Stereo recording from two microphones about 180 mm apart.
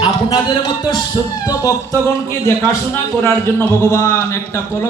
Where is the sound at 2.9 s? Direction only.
10° left (ahead or behind).